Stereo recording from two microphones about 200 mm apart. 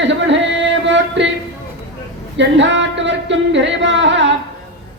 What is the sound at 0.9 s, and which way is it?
Music, 65° right (ahead or behind).